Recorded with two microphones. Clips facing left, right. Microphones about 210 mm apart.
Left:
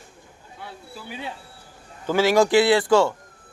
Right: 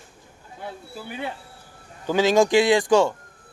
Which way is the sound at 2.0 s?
15° right (ahead or behind).